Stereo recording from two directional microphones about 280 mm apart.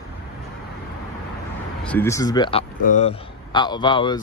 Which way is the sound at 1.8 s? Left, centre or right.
Centre.